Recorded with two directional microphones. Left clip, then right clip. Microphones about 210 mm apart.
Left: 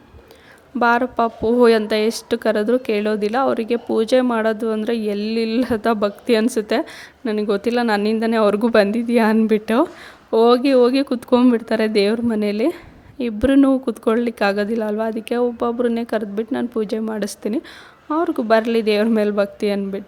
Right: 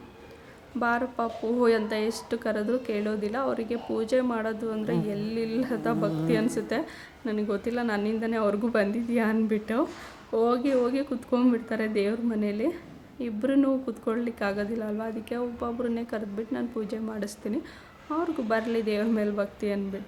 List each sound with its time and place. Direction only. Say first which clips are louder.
0.8 s a woman's voice: left 11 dB; 40° left (ahead or behind)